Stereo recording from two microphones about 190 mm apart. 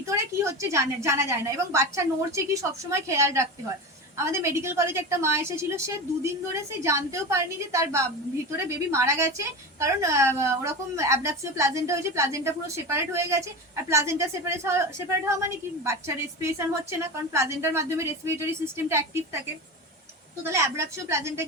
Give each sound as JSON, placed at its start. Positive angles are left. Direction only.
{"t": 0.0, "sound": "a woman's voice", "side_deg": -15}
{"t": 20.5, "sound": "a woman's voice", "side_deg": -15}